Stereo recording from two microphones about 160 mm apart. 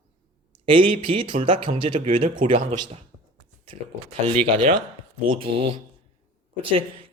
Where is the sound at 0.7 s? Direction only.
35° right (ahead or behind).